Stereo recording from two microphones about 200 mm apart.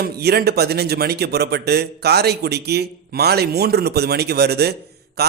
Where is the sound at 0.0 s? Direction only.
55° right (ahead or behind).